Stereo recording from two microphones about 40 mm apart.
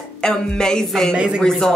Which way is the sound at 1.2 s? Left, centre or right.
Right.